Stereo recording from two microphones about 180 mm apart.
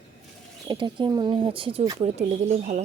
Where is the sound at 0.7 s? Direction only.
25° right (ahead or behind).